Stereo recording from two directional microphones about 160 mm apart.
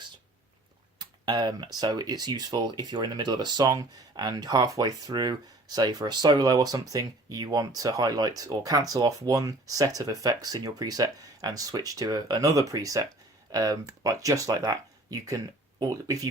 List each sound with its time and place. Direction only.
0.9 s speech: 25° right (ahead or behind)